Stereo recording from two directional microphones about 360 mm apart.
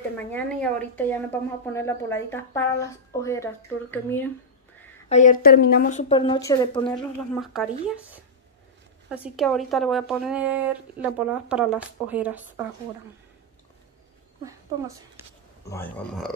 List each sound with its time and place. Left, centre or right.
0.3 s speech: centre
5.1 s speech: left
7.3 s speech: centre
14.4 s speech: centre
15.7 s speech: centre